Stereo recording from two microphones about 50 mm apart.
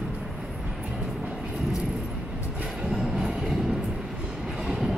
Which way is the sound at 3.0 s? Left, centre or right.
Centre.